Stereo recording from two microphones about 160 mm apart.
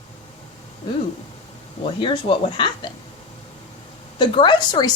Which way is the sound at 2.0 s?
30° left (ahead or behind).